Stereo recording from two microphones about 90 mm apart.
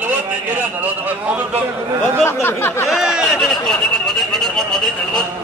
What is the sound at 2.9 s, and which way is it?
Speech, 5° right (ahead or behind).